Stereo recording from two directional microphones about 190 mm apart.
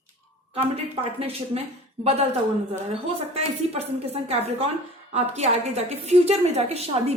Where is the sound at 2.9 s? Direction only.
30° right (ahead or behind).